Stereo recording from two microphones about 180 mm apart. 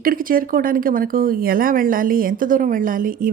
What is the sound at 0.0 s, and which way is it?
Speech, 50° right (ahead or behind).